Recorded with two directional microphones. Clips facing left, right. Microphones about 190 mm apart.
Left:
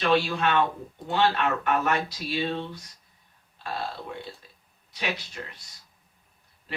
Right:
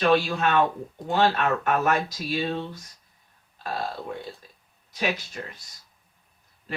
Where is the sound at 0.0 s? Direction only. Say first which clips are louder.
Right 2 dB; 45° right (ahead or behind).